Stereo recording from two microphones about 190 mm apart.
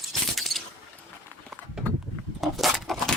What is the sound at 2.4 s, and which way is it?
Keys jangling, centre (ahead or behind).